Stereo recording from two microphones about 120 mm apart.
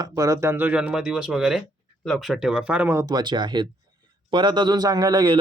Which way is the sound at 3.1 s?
35° right (ahead or behind).